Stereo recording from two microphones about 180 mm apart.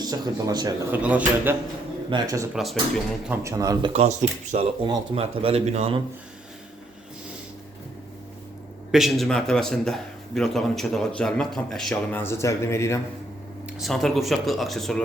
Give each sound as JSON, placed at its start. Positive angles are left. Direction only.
{"t": 0.0, "sound": "speech", "side_deg": -20}
{"t": 0.9, "sound": "speech", "side_deg": -10}
{"t": 2.0, "sound": "speech", "side_deg": -20}
{"t": 2.6, "sound": "a man's voice", "side_deg": 0}
{"t": 3.4, "sound": "speech", "side_deg": -20}
{"t": 4.5, "sound": "speech", "side_deg": -30}
{"t": 8.9, "sound": "a man's voice", "side_deg": 0}
{"t": 12.2, "sound": "speech", "side_deg": 15}
{"t": 13.7, "sound": "a man's voice", "side_deg": 0}